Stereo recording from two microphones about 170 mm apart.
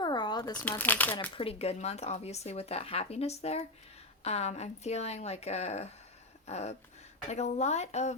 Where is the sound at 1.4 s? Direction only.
35° left (ahead or behind).